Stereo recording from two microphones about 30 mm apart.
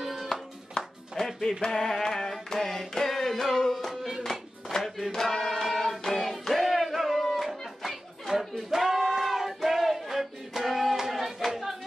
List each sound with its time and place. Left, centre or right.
0.0 s music: centre
0.8 s music: left
1.8 s a sound: centre
2.5 s carnatic music: centre
2.9 s music: centre
3.9 s music: centre
4.2 s music: centre
5.1 s hands: centre
6.4 s music: centre